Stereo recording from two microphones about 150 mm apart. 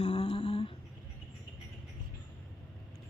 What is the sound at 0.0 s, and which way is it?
Humming, 45° left (ahead or behind).